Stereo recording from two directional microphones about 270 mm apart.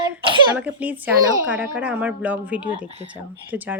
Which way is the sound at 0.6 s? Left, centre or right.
Centre.